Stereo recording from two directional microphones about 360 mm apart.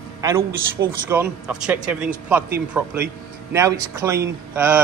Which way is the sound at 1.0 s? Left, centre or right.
Centre.